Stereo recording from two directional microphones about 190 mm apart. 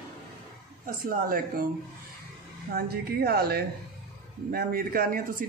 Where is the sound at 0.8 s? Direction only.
45° right (ahead or behind).